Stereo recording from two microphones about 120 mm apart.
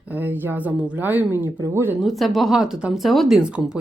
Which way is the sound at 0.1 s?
15° right (ahead or behind).